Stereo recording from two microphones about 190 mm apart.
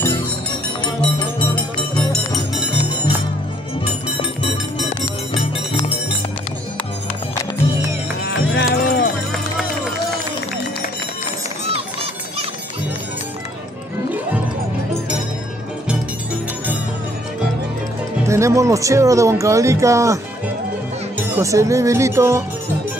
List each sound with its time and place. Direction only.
2.0 s music: centre (ahead or behind)
8.2 s music: 75° left (ahead or behind)
11.7 s a sound: 30° right (ahead or behind)
18.2 s speech: 15° right (ahead or behind)
21.4 s speech: 15° right (ahead or behind)